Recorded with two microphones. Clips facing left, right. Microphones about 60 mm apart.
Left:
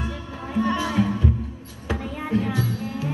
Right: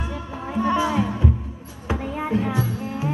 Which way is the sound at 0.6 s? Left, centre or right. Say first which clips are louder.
Right 2 dB; right.